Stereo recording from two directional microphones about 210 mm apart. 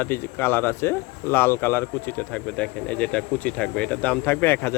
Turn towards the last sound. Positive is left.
turn(degrees=10)  # may be behind; listen again after turning